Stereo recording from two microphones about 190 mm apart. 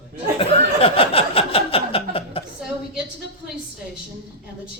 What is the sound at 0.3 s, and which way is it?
Snicker, 30° left (ahead or behind).